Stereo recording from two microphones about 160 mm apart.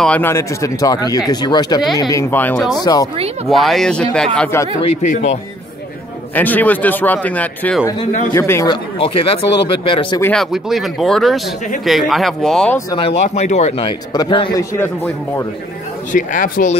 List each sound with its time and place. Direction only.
0.0 s speech: 10° left (ahead or behind)
2.8 s speech: 25° left (ahead or behind)
3.4 s speech: centre (ahead or behind)
5.1 s speech: 45° left (ahead or behind)
6.3 s speech: 10° left (ahead or behind)
8.9 s speech: 35° left (ahead or behind)
10.2 s speech: 5° left (ahead or behind)
12.9 s speech: 40° left (ahead or behind)
13.8 s speech: 30° left (ahead or behind)
14.6 s speech: 20° left (ahead or behind)
16.1 s speech: 55° left (ahead or behind)